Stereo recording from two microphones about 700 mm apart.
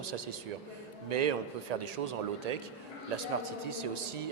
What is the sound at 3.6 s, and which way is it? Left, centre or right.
Speech, right.